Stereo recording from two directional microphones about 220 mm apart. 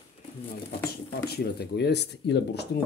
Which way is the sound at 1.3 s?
45° left (ahead or behind).